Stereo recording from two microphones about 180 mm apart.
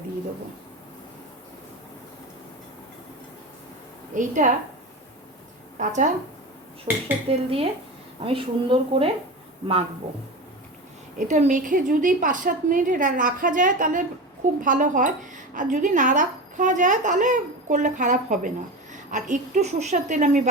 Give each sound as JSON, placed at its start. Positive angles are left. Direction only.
{"t": 4.1, "sound": "a woman's voice", "side_deg": -45}
{"t": 5.8, "sound": "a woman's voice", "side_deg": -45}
{"t": 6.9, "sound": "cutlery", "side_deg": -10}
{"t": 7.3, "sound": "speech", "side_deg": -30}
{"t": 11.3, "sound": "a woman's voice", "side_deg": -40}